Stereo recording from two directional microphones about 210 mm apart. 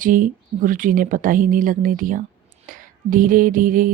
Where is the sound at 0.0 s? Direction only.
40° right (ahead or behind).